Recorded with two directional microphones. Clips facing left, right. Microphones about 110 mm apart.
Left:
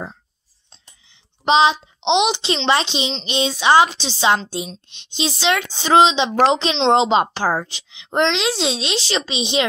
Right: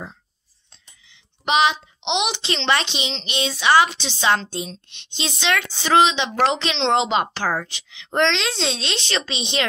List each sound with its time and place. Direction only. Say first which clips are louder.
1.0 s a woman's voice: left 6 dB; 30° left (ahead or behind)